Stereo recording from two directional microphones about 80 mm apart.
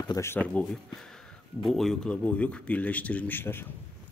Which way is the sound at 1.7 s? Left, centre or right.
Centre.